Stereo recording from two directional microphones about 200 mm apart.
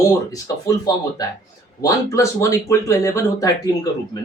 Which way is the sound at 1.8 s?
15° left (ahead or behind).